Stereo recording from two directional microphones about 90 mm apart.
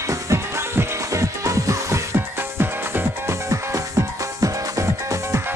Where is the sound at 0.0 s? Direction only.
35° right (ahead or behind).